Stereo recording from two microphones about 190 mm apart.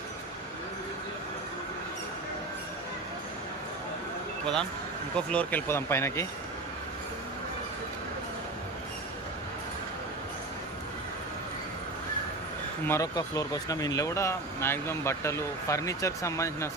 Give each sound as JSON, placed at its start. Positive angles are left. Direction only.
{"t": 5.1, "sound": "speech", "side_deg": 5}
{"t": 12.9, "sound": "speech", "side_deg": 15}